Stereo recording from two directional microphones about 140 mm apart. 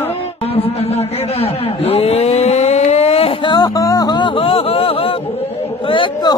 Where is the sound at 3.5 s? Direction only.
25° left (ahead or behind).